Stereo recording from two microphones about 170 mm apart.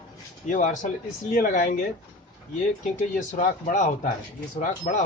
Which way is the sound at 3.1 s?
50° left (ahead or behind).